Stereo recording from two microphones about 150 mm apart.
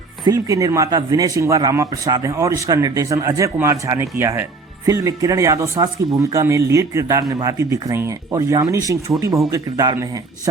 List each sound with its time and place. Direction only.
0.3 s speech: 20° right (ahead or behind)